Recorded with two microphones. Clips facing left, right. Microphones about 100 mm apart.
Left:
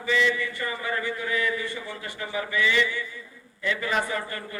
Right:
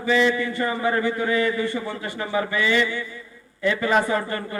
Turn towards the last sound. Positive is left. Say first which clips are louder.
# right 7 dB
turn(degrees=-40)  # may be behind; listen again after turning